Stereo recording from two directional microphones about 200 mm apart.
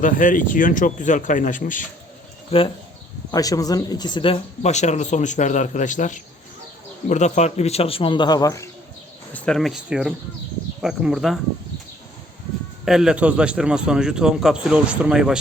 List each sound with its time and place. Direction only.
0.0 s speech: 40° left (ahead or behind)
2.5 s a man's voice: 25° left (ahead or behind)
9.3 s a man's voice: centre (ahead or behind)
12.8 s a man's voice: centre (ahead or behind)